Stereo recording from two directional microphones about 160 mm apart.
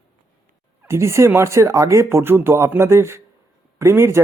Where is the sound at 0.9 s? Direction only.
15° right (ahead or behind).